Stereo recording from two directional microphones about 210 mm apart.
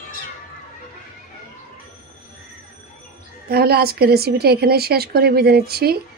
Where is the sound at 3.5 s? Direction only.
50° right (ahead or behind).